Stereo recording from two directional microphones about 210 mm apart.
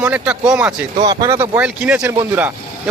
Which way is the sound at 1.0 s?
20° right (ahead or behind).